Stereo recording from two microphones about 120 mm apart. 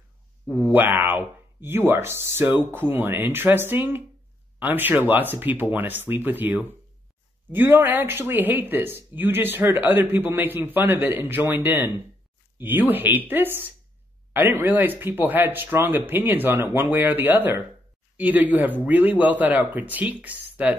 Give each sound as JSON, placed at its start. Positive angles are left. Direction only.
{"t": 0.7, "sound": "speech", "side_deg": -15}